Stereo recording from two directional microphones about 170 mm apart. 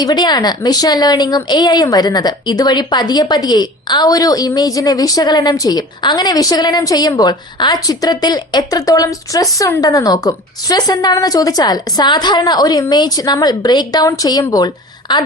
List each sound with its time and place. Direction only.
0.0 s speech: 25° left (ahead or behind)